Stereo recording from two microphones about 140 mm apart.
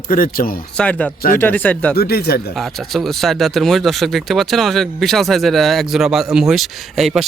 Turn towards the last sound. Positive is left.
turn(degrees=0)  # may be behind; listen again after turning